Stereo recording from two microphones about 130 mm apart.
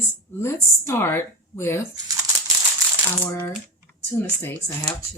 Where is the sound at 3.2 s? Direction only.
10° left (ahead or behind).